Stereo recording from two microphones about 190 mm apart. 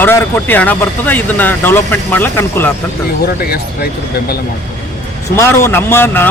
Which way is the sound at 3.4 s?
55° left (ahead or behind).